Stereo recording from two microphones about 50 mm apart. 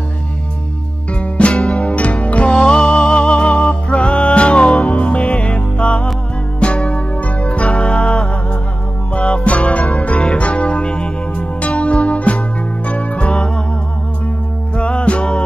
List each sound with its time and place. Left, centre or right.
1.4 s music: left
14.8 s music: left